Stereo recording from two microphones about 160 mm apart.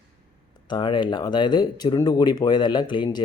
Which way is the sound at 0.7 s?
30° left (ahead or behind).